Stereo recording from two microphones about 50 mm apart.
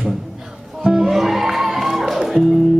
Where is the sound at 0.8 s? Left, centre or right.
Centre.